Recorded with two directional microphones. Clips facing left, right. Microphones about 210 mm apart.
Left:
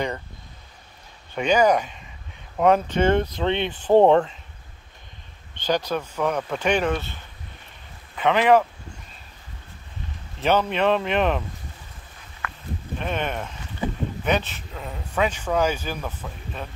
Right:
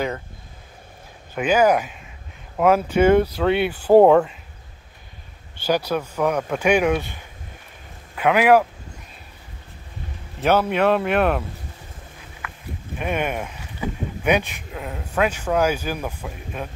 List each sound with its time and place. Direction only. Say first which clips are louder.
1.3 s speech: right 1 dB; 5° right (ahead or behind)
5.6 s speech: right 2 dB; 10° right (ahead or behind)
10.4 s speech: right 2 dB; 10° right (ahead or behind)
12.9 s speech: right 3 dB; 10° right (ahead or behind)